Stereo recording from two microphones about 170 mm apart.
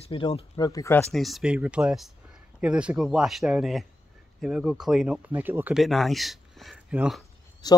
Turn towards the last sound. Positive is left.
turn(degrees=25)  # may be behind; listen again after turning